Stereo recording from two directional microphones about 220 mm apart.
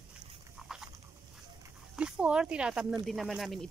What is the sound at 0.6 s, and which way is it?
Dog, centre (ahead or behind).